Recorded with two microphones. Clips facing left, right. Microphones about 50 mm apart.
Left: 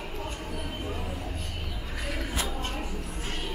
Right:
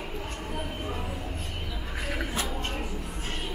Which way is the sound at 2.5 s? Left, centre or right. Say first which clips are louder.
Right 1 dB; right.